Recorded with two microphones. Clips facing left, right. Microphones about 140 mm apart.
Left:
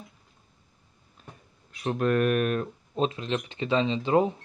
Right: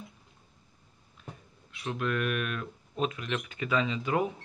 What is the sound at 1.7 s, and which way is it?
Speech, 40° left (ahead or behind).